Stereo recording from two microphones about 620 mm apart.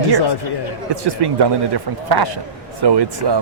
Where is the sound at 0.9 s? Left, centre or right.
Right.